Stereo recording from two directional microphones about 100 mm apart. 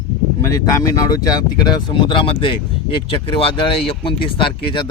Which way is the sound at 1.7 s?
55° left (ahead or behind).